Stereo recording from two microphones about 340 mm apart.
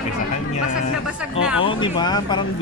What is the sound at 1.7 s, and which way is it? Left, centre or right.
Speech, centre.